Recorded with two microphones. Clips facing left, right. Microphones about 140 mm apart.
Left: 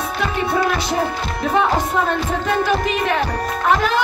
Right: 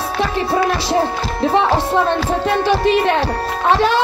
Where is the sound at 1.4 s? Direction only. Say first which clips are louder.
Right 3 dB; 30° right (ahead or behind).